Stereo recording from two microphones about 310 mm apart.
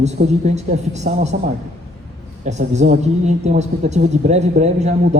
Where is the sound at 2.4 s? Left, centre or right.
Right.